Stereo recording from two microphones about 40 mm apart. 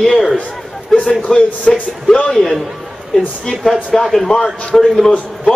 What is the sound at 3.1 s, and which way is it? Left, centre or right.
Speech, centre.